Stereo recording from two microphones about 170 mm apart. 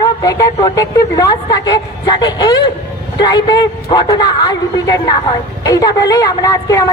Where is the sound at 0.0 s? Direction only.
20° left (ahead or behind).